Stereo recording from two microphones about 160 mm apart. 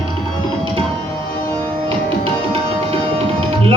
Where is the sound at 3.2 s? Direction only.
35° right (ahead or behind).